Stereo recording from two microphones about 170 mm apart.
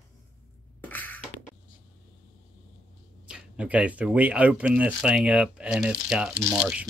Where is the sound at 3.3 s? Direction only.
5° right (ahead or behind).